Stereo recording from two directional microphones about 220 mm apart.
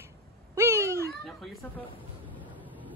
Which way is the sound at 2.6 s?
10° right (ahead or behind).